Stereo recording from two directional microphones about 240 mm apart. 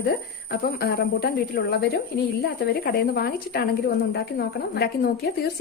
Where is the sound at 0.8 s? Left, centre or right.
Left.